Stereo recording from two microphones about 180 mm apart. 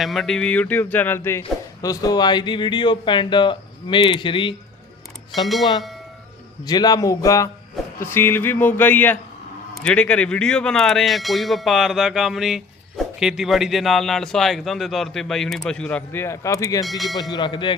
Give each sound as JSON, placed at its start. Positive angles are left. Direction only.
{"t": 0.0, "sound": "speech", "side_deg": 0}
{"t": 5.3, "sound": "speech", "side_deg": 0}
{"t": 6.7, "sound": "speech", "side_deg": 20}
{"t": 8.0, "sound": "a sound", "side_deg": 15}
{"t": 9.7, "sound": "speech", "side_deg": 5}
{"t": 16.8, "sound": "speech", "side_deg": 0}
{"t": 17.2, "sound": "speech", "side_deg": 25}